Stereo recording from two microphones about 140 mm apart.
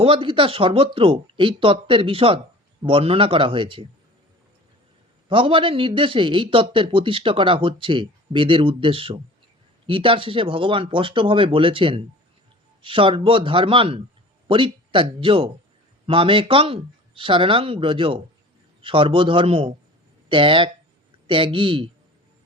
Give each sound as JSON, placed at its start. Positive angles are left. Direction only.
{"t": 0.0, "sound": "a man's voice", "side_deg": -40}
{"t": 5.3, "sound": "a man's voice", "side_deg": -40}